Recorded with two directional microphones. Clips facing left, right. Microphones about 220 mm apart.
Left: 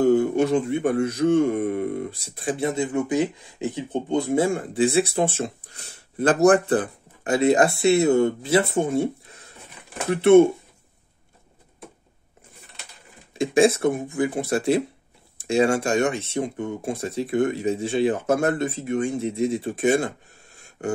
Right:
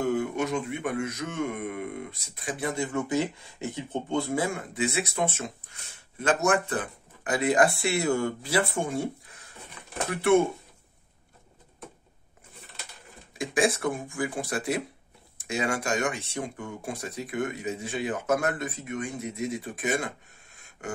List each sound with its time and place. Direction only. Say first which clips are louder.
0.0 s speech: left 9 dB; 30° left (ahead or behind)
13.3 s speech: left 8 dB; 25° left (ahead or behind)